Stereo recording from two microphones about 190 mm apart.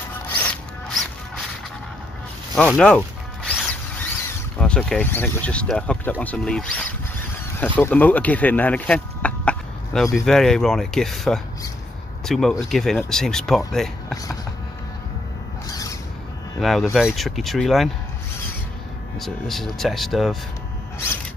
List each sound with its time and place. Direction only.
0.4 s zipper: 5° left (ahead or behind)
2.5 s speech: centre (ahead or behind)
3.4 s zipper: 5° left (ahead or behind)
4.6 s speech: 5° left (ahead or behind)
15.7 s a sound: 20° left (ahead or behind)
16.5 s speech: centre (ahead or behind)
19.1 s speech: centre (ahead or behind)